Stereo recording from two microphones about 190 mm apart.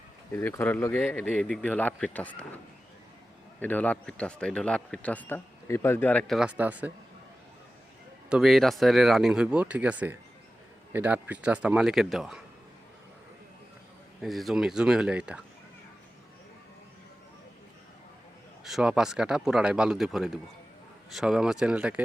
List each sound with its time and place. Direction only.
0.3 s speech: 10° left (ahead or behind)
3.6 s speech: 10° left (ahead or behind); by 6.9 s 10° right (ahead or behind)
8.3 s speech: centre (ahead or behind)
14.2 s speech: centre (ahead or behind)
18.6 s speech: centre (ahead or behind)